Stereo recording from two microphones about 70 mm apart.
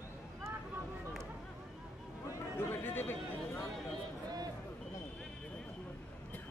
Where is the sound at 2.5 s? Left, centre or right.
Left.